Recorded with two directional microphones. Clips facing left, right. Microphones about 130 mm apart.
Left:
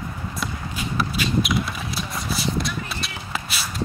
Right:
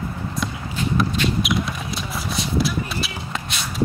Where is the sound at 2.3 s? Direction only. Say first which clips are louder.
Right 3 dB; centre (ahead or behind).